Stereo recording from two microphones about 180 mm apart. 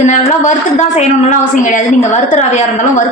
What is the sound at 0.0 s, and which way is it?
A woman's voice, 40° left (ahead or behind).